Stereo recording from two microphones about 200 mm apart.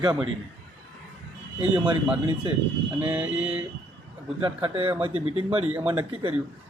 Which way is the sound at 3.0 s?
5° right (ahead or behind).